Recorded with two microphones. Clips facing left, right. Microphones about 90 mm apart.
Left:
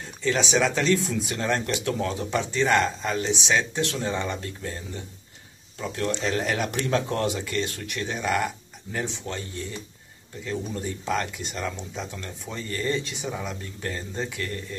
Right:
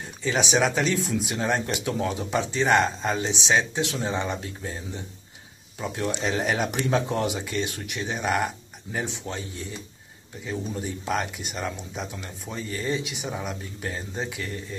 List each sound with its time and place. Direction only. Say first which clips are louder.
0.2 s speech: even; 15° right (ahead or behind)
10.4 s speech: even; 10° right (ahead or behind)